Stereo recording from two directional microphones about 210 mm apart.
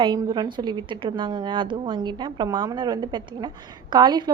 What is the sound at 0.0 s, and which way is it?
A woman's voice, 20° right (ahead or behind).